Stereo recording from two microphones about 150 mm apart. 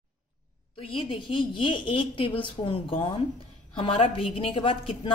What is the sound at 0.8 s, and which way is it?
A woman's voice, 35° left (ahead or behind).